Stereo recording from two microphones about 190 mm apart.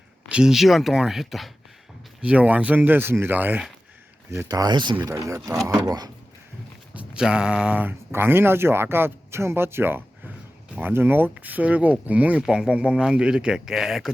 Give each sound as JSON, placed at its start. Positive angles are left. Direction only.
{"t": 0.3, "sound": "speech", "side_deg": -5}
{"t": 6.9, "sound": "speech", "side_deg": -5}